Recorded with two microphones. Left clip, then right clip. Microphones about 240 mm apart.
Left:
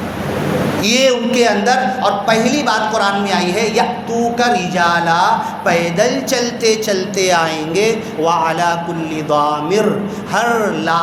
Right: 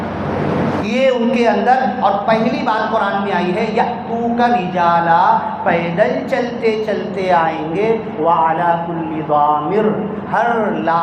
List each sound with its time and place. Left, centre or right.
0.9 s a man's voice: left